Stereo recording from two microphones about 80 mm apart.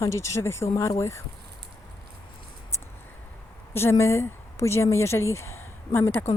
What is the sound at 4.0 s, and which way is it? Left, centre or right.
Speech, left.